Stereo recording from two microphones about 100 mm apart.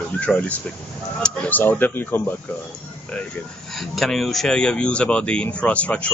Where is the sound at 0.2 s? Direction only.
15° left (ahead or behind).